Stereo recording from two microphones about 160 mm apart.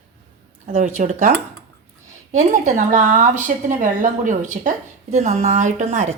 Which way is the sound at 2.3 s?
50° right (ahead or behind).